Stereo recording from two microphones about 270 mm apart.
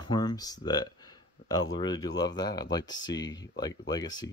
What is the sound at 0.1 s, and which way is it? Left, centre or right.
Speech, centre.